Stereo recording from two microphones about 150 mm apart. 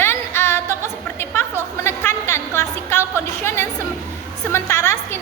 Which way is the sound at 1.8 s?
15° left (ahead or behind).